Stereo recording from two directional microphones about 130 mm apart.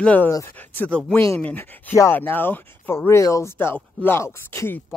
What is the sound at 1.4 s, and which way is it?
Speech, 10° left (ahead or behind).